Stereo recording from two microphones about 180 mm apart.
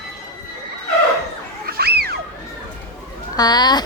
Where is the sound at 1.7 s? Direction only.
60° right (ahead or behind).